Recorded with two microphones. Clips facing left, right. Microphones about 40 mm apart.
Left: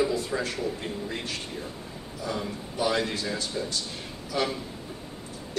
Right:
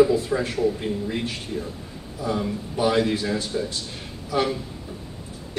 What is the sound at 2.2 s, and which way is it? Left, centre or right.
A man's voice, centre.